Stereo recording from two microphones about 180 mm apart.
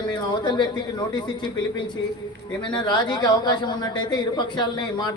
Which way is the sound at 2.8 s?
25° left (ahead or behind).